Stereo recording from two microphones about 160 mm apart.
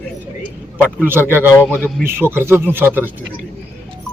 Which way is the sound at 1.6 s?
10° left (ahead or behind).